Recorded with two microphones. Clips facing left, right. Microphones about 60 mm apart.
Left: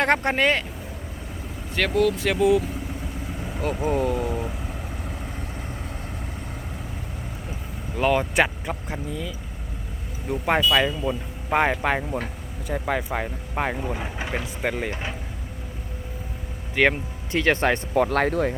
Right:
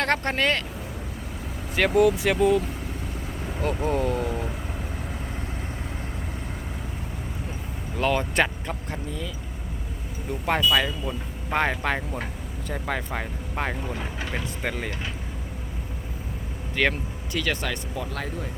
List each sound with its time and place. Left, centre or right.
0.0 s speech: centre
1.7 s speech: centre
2.2 s speech: centre
7.9 s speech: centre
16.7 s speech: centre
17.3 s speech: left
17.9 s speech: left